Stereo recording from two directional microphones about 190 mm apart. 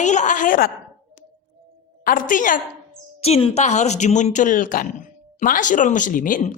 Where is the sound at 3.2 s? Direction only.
30° left (ahead or behind).